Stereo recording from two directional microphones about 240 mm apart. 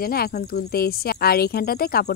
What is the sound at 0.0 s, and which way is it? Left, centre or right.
Speech, left.